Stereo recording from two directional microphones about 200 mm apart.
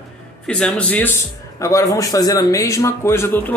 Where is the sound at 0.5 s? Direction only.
5° left (ahead or behind).